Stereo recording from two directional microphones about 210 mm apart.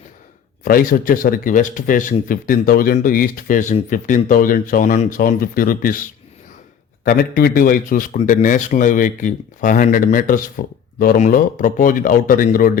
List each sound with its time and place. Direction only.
0.6 s speech: 40° left (ahead or behind)